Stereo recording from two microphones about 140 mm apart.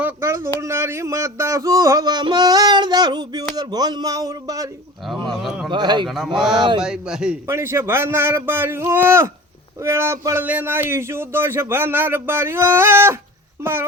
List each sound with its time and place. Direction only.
0.0 s a sound: 20° right (ahead or behind)
5.3 s speech: 5° right (ahead or behind)
5.7 s a man's voice: 35° right (ahead or behind)
6.1 s speech: centre (ahead or behind)
6.6 s a man's voice: 35° right (ahead or behind)
6.8 s speech: 5° right (ahead or behind)
7.4 s speech: 15° right (ahead or behind)